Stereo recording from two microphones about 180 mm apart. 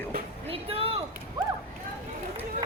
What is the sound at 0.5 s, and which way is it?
Speech, 30° right (ahead or behind).